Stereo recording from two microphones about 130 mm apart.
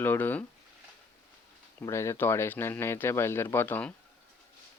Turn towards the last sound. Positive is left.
turn(degrees=15)  # may be behind; listen again after turning